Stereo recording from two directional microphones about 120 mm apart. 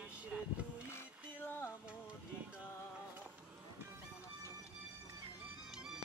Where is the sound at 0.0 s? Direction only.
10° right (ahead or behind).